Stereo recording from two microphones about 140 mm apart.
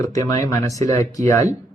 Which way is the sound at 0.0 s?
25° left (ahead or behind).